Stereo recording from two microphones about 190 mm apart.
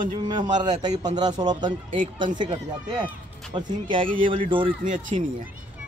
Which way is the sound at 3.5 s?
25° right (ahead or behind).